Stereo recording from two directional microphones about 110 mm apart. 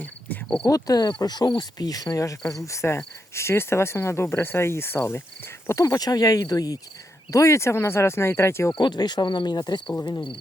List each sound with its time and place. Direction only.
0.0 s cricket: 10° left (ahead or behind)
0.7 s speech: 35° left (ahead or behind)
8.8 s speech: 40° left (ahead or behind)